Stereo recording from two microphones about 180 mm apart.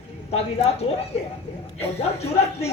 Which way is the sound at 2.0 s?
35° left (ahead or behind).